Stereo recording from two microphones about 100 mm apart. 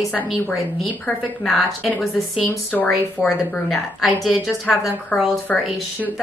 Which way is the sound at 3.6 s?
Centre (ahead or behind).